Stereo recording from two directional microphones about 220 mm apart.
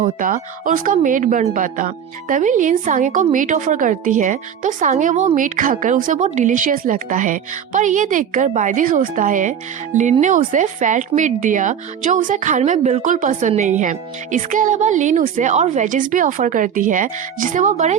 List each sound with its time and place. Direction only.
0.0 s speech: 35° right (ahead or behind)